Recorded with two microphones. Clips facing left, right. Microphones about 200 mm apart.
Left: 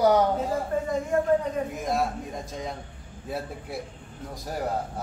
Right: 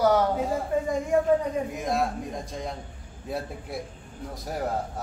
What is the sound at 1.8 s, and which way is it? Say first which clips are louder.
Speech: even; centre (ahead or behind).